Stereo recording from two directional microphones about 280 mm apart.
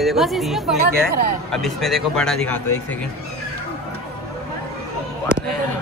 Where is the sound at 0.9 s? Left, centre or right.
Right.